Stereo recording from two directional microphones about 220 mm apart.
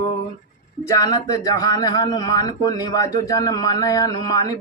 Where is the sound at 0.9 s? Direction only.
15° left (ahead or behind).